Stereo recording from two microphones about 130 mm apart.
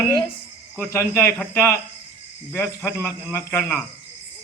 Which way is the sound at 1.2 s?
10° left (ahead or behind).